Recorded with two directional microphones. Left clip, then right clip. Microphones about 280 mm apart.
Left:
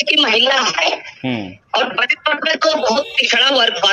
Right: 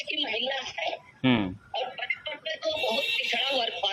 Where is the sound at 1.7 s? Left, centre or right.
Left.